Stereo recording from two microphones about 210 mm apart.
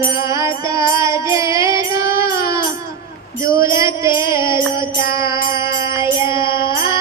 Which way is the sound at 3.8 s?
15° right (ahead or behind).